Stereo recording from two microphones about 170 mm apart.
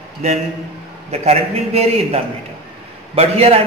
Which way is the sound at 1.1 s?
40° right (ahead or behind).